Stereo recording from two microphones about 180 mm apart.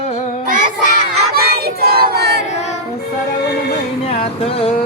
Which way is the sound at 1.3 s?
55° right (ahead or behind).